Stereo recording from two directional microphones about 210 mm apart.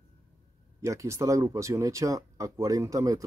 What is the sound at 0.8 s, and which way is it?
Speech, 15° right (ahead or behind).